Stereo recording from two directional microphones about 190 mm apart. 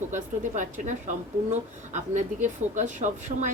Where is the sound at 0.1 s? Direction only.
40° right (ahead or behind).